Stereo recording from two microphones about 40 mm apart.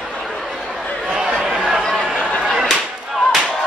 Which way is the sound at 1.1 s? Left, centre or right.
Centre.